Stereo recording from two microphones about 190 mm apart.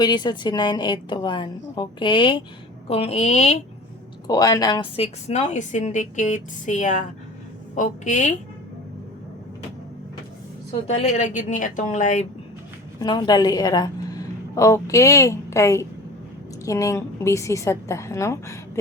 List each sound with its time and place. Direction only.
0.0 s a woman's voice: 20° left (ahead or behind)
4.3 s a woman's voice: 20° left (ahead or behind); by 8.4 s 40° left (ahead or behind)
11.0 s a woman's voice: 40° left (ahead or behind)
13.0 s a woman's voice: 20° left (ahead or behind)